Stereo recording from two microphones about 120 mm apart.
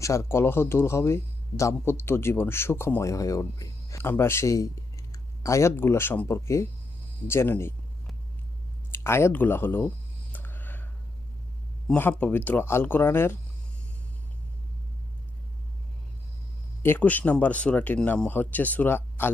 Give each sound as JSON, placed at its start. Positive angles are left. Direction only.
{"t": 0.0, "sound": "speech", "side_deg": 25}
{"t": 8.9, "sound": "speech", "side_deg": 20}
{"t": 10.3, "sound": "a sound", "side_deg": 15}
{"t": 11.9, "sound": "speech", "side_deg": 15}
{"t": 16.8, "sound": "speech", "side_deg": 15}